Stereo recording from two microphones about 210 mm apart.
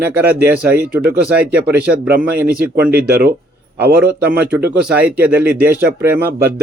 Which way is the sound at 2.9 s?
50° right (ahead or behind).